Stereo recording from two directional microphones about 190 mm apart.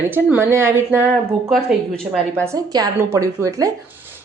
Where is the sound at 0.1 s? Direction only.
10° right (ahead or behind).